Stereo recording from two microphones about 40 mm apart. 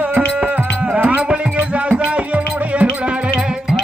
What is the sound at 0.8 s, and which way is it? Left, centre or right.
Music, right.